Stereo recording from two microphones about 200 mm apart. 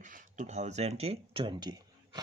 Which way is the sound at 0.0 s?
40° right (ahead or behind).